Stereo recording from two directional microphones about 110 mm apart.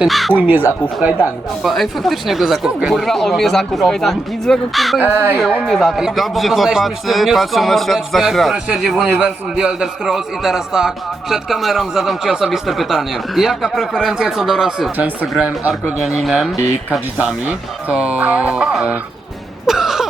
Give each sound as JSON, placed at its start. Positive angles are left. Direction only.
{"t": 0.0, "sound": "a man's voice", "side_deg": 0}
{"t": 0.3, "sound": "music", "side_deg": -15}
{"t": 1.6, "sound": "a man's voice", "side_deg": 0}
{"t": 4.9, "sound": "music", "side_deg": -15}
{"t": 5.4, "sound": "a man's voice", "side_deg": 5}
{"t": 15.4, "sound": "music", "side_deg": -15}
{"t": 16.0, "sound": "a man's voice", "side_deg": 0}
{"t": 17.8, "sound": "music", "side_deg": -15}